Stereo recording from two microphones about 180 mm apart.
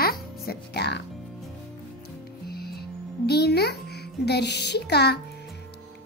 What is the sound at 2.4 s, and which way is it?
Music, 60° left (ahead or behind).